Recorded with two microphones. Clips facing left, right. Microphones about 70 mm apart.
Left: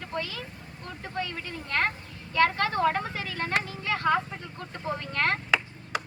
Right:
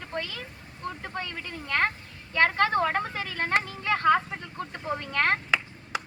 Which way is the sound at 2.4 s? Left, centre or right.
Right.